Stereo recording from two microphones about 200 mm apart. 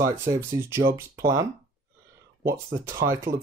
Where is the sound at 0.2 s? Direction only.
10° right (ahead or behind).